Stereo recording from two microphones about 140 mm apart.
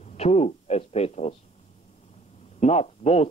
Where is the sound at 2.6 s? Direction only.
50° left (ahead or behind).